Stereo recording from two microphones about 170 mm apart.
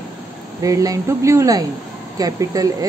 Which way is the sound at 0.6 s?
20° right (ahead or behind).